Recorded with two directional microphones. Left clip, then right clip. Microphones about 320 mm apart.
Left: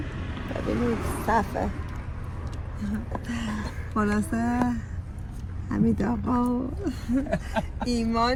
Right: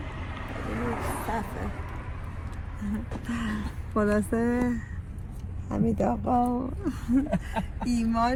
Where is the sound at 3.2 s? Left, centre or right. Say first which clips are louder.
Even; centre.